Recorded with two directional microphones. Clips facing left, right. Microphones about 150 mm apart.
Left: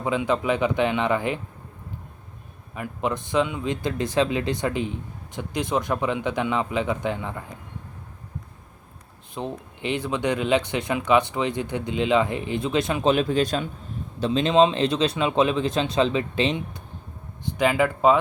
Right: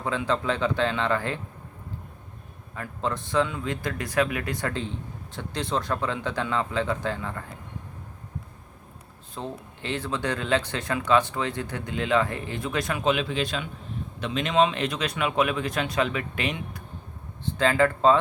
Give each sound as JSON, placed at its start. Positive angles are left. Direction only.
{"t": 0.0, "sound": "a man's voice", "side_deg": 15}
{"t": 2.7, "sound": "a man's voice", "side_deg": 15}
{"t": 9.3, "sound": "speech", "side_deg": 15}
{"t": 13.1, "sound": "speech", "side_deg": 40}
{"t": 17.4, "sound": "a man's voice", "side_deg": 15}